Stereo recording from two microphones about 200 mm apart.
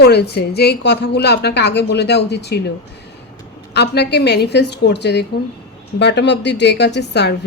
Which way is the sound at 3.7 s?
55° left (ahead or behind).